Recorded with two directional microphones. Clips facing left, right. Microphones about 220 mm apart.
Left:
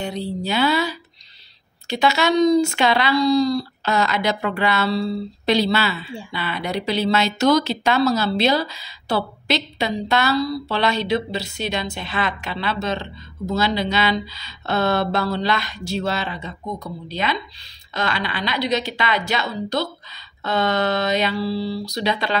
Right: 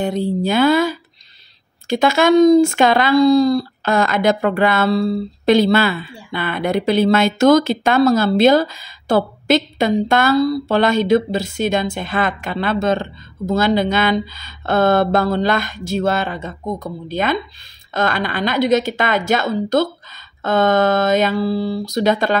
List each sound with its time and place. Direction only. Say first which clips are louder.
0.0 s speech: right 7 dB; 50° right (ahead or behind)